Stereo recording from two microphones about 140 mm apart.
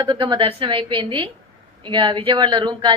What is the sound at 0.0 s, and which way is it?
A woman's voice, 35° right (ahead or behind).